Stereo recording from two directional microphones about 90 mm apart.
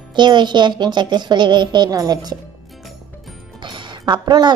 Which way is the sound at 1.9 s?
45° right (ahead or behind).